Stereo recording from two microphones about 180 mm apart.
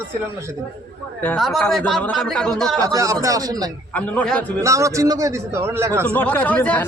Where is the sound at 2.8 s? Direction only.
20° right (ahead or behind).